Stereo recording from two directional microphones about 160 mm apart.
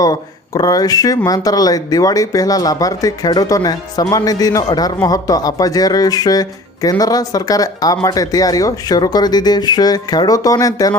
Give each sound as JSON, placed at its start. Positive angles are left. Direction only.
{"t": 0.0, "sound": "speech", "side_deg": 25}